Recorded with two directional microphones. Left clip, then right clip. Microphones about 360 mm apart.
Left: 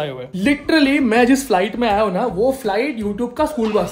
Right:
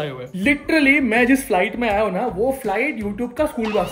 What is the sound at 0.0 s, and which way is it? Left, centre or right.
Speech, centre.